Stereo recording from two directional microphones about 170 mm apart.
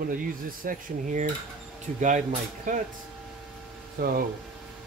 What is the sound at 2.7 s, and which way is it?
Speech, 50° right (ahead or behind).